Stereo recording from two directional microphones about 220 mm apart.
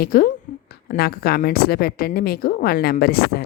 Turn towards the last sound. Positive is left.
turn(degrees=45)  # may be behind; listen again after turning